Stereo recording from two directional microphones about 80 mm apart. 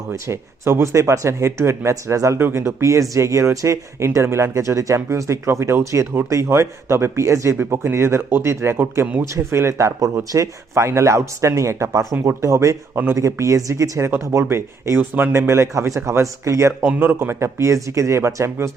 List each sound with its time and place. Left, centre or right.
0.1 s speech: right